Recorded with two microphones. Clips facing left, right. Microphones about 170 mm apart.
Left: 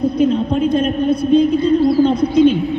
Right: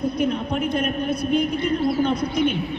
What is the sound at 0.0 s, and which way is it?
A man's voice, 30° left (ahead or behind).